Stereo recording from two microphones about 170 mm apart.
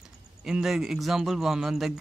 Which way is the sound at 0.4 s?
5° right (ahead or behind).